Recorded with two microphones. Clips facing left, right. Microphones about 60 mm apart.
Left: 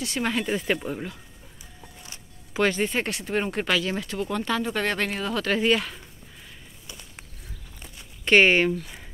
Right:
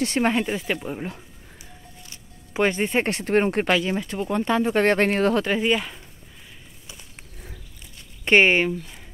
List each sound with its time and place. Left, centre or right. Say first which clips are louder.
0.0 s speech: right 6 dB; right
0.3 s speech: right 2 dB; centre
0.9 s speech: even; centre
2.5 s speech: right 2 dB; right
5.4 s speech: even; centre
8.3 s speech: right 1 dB; centre
8.6 s speech: left 1 dB; centre